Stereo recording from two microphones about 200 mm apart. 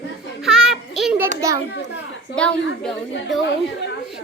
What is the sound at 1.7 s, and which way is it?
Speech, 55° left (ahead or behind).